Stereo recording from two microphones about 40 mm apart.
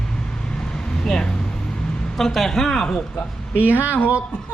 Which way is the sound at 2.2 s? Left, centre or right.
Centre.